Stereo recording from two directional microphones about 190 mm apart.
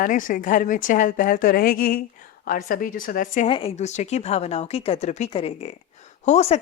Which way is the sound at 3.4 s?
30° left (ahead or behind).